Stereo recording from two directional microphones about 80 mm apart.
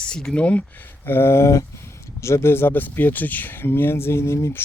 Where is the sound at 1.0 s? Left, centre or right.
Left.